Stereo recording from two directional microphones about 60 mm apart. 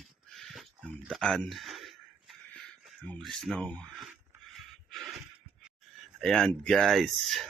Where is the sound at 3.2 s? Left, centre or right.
Centre.